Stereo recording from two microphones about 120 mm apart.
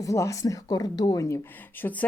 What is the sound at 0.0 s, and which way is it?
Speech, 25° left (ahead or behind).